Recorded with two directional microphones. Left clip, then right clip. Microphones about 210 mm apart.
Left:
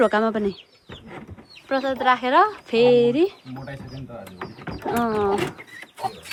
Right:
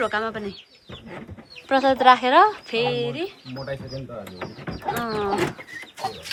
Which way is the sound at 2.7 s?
15° left (ahead or behind).